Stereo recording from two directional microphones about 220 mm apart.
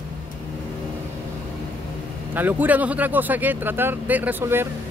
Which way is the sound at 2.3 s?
10° right (ahead or behind).